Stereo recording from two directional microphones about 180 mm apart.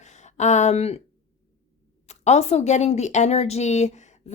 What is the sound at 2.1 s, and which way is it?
Speech, 35° left (ahead or behind).